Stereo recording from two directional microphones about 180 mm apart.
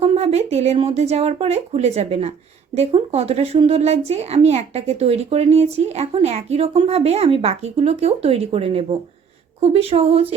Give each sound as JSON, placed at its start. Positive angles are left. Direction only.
{"t": 0.0, "sound": "a woman's voice", "side_deg": -35}